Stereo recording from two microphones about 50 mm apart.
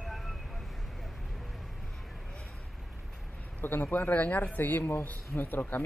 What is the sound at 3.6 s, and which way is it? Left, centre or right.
Speech, left.